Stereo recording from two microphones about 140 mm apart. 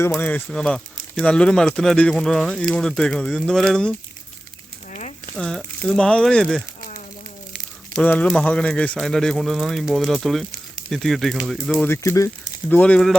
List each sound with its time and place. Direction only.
0.1 s speech: 10° left (ahead or behind)
4.9 s a sound: 55° left (ahead or behind)
5.4 s speech: 5° left (ahead or behind)
7.9 s speech: 10° left (ahead or behind)
11.8 s speech: 20° left (ahead or behind)
12.6 s speech: 10° left (ahead or behind)